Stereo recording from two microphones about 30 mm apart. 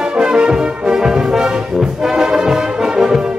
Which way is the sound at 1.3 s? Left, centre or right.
Centre.